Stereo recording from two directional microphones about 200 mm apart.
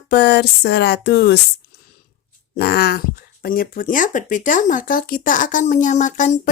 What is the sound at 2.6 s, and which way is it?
Speech, 50° left (ahead or behind).